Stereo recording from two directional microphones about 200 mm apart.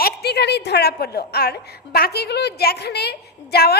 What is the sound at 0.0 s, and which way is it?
A woman's voice, 55° left (ahead or behind).